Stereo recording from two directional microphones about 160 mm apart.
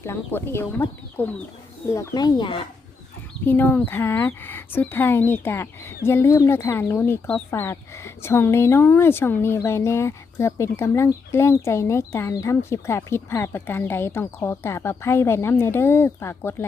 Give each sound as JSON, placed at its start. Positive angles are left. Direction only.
{"t": 0.0, "sound": "speech", "side_deg": 15}
{"t": 3.4, "sound": "speech", "side_deg": 10}